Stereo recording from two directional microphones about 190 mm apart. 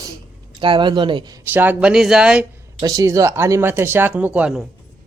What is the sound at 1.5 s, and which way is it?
Speech, 10° right (ahead or behind).